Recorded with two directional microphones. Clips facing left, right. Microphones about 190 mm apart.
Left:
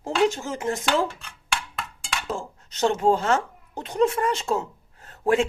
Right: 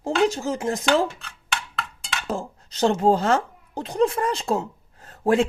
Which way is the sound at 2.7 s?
35° right (ahead or behind).